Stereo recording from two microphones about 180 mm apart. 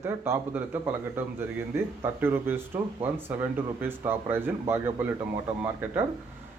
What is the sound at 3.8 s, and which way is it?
Speech, 10° right (ahead or behind).